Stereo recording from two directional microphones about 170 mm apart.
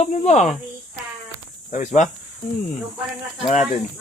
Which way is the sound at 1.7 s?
45° left (ahead or behind).